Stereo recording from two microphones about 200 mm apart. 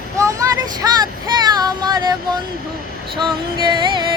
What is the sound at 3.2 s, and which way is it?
Music, 20° right (ahead or behind).